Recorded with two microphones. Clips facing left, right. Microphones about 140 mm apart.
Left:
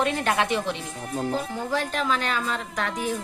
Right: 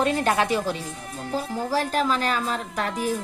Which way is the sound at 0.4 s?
5° right (ahead or behind).